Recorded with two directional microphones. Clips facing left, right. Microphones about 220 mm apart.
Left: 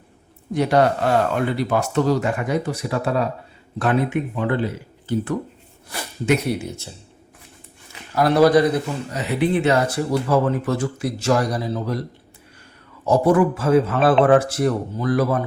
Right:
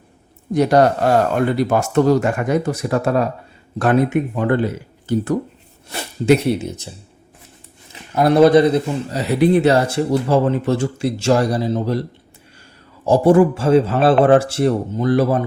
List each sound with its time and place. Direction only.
0.5 s speech: 40° right (ahead or behind)
5.0 s speech: 40° right (ahead or behind)
5.9 s speech: 30° right (ahead or behind)
8.1 s speech: 20° right (ahead or behind)
13.1 s speech: 30° right (ahead or behind)